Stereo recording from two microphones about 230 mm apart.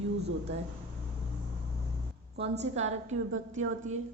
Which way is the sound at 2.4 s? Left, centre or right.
Right.